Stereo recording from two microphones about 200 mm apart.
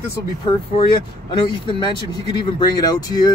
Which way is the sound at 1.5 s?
25° left (ahead or behind).